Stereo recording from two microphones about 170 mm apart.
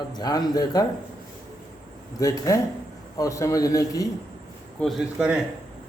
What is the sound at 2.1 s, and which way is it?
Speech, 20° left (ahead or behind).